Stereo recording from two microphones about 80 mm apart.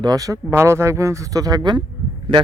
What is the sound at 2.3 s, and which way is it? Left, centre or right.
Speech, right.